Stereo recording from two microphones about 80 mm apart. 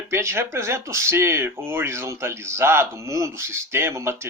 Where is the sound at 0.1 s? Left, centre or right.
Right.